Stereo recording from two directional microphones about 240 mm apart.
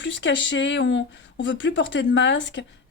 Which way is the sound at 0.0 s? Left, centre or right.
Left.